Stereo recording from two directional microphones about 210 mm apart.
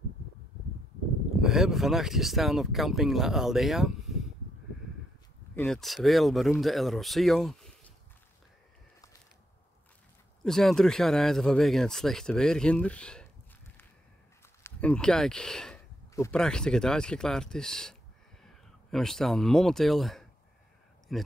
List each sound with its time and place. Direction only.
1.4 s speech: centre (ahead or behind)
5.5 s speech: 5° left (ahead or behind)
10.4 s speech: centre (ahead or behind)
14.6 s speech: 5° left (ahead or behind)